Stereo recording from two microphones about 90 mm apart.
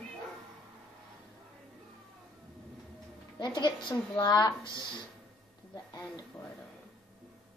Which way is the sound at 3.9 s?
45° left (ahead or behind).